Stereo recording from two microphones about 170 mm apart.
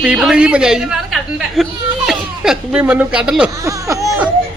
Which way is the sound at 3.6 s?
20° right (ahead or behind).